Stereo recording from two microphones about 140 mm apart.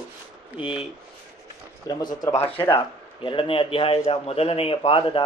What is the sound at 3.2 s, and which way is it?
A man's voice, 40° left (ahead or behind).